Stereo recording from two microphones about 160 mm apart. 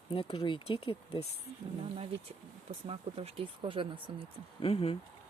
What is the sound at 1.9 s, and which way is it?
Speech, 35° right (ahead or behind).